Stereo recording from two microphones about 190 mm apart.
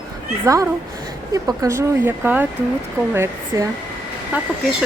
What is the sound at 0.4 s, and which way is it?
Speech, 15° right (ahead or behind).